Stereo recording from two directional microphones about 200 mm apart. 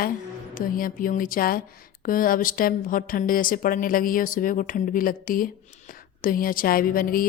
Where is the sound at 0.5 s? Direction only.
45° left (ahead or behind).